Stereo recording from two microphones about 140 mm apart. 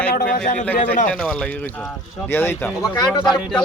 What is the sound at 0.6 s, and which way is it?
A man's voice, 10° left (ahead or behind).